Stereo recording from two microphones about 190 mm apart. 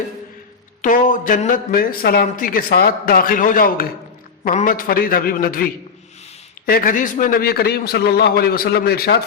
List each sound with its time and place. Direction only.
0.8 s speech: 45° left (ahead or behind)
6.7 s speech: 50° left (ahead or behind)